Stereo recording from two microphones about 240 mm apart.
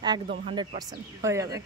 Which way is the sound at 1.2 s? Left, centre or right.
Centre.